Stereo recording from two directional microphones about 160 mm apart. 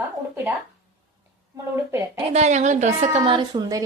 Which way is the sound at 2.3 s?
45° right (ahead or behind).